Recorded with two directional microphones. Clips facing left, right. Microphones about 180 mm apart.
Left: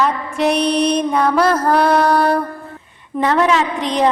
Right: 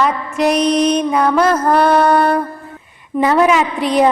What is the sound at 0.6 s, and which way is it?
Mantra, 30° left (ahead or behind).